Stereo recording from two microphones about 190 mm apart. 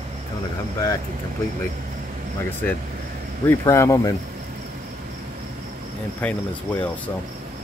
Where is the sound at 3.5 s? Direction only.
15° left (ahead or behind).